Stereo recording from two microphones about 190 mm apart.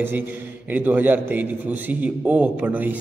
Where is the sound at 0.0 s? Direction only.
10° right (ahead or behind).